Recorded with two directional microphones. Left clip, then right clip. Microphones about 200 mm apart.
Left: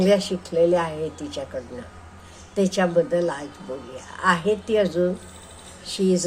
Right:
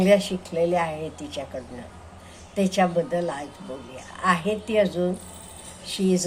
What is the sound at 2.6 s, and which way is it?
A woman's voice, 10° left (ahead or behind).